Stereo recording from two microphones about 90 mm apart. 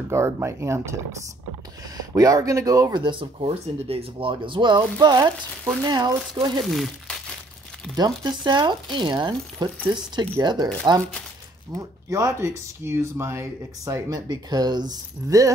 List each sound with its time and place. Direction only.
0.1 s speech: 30° right (ahead or behind)
2.0 s speech: 40° right (ahead or behind)
2.9 s speech: 60° right (ahead or behind)
6.6 s speech: centre (ahead or behind)
7.9 s speech: 50° right (ahead or behind)
11.7 s speech: 40° right (ahead or behind)
15.2 s speech: 35° right (ahead or behind)